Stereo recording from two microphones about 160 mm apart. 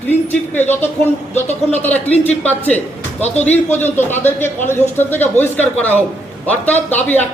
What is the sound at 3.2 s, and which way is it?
Speech, 45° left (ahead or behind).